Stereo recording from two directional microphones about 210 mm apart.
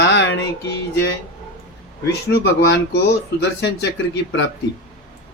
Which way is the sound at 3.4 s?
55° left (ahead or behind).